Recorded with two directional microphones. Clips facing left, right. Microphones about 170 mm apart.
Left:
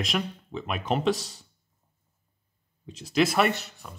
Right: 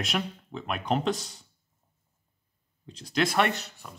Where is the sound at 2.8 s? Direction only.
5° left (ahead or behind).